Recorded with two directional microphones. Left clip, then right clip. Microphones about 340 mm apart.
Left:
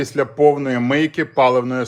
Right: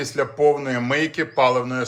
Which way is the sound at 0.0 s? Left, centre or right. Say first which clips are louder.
Left 4 dB; left.